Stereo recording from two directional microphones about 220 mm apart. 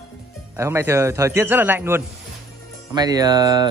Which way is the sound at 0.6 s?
10° right (ahead or behind).